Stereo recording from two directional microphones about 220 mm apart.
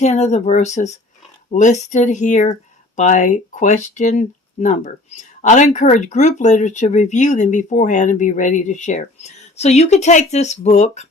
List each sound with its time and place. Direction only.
0.0 s speech: 30° left (ahead or behind)